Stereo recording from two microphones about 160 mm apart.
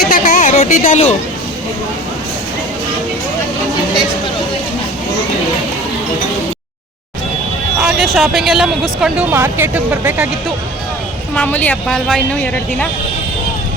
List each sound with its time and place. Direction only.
0.0 s a sound: 55° left (ahead or behind)
7.8 s speech: centre (ahead or behind)
9.3 s speech: 15° right (ahead or behind)
11.3 s a woman's voice: 10° left (ahead or behind)